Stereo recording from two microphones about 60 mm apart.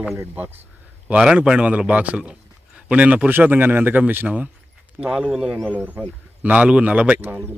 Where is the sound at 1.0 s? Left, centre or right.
Centre; by 4.4 s right.